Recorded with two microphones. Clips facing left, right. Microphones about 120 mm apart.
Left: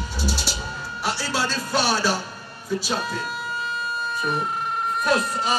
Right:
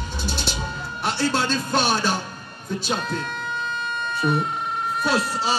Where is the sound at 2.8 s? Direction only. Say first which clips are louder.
Right 1 dB; 5° left (ahead or behind).